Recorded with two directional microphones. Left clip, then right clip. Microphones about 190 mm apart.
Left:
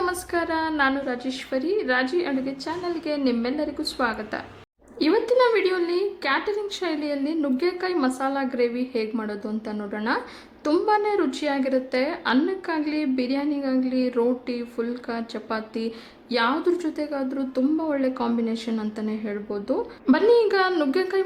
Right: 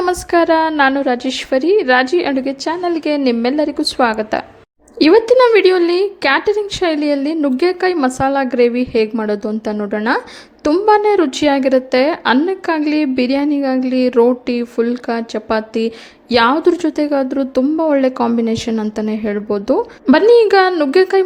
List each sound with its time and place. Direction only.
0.0 s a woman's voice: 35° right (ahead or behind)